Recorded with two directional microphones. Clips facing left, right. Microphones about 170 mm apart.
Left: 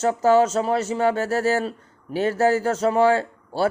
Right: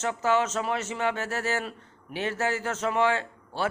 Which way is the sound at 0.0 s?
35° left (ahead or behind).